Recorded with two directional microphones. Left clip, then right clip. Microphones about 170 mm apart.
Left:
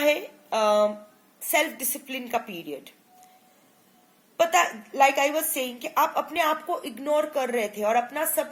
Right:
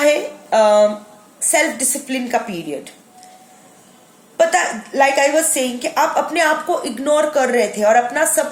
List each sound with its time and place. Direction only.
0.0 s a sound: 35° left (ahead or behind)
1.5 s a woman's voice: 35° left (ahead or behind)
4.4 s a woman's voice: 35° left (ahead or behind)